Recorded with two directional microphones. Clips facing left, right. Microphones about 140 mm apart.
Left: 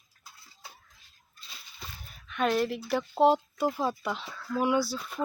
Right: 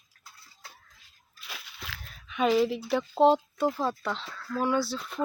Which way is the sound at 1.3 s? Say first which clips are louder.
Right 6 dB; 85° right.